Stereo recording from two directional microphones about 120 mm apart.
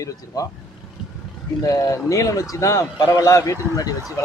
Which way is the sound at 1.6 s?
30° left (ahead or behind).